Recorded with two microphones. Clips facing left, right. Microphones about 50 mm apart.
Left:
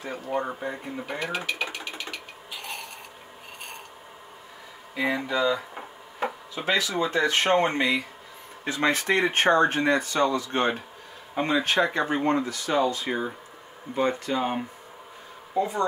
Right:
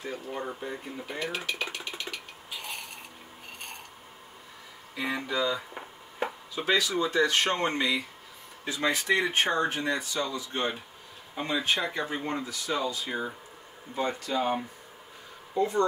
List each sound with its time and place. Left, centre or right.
0.0 s speech: left
1.2 s a sound: centre
4.9 s speech: left
6.6 s speech: left
8.6 s speech: left
11.6 s speech: left
15.5 s speech: centre